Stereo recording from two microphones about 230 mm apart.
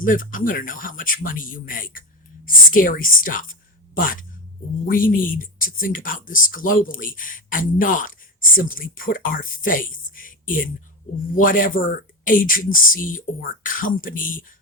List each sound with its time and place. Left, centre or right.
0.0 s a woman's voice: left